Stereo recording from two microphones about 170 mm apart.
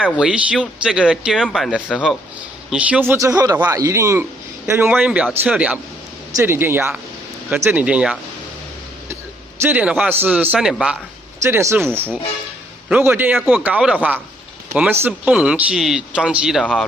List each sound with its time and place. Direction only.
0.0 s speech: 5° right (ahead or behind)
9.6 s speech: 10° right (ahead or behind)
11.4 s speech: 15° right (ahead or behind)
12.9 s speech: 10° right (ahead or behind)